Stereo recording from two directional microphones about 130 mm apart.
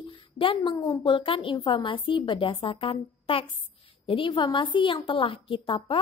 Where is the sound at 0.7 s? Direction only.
35° left (ahead or behind).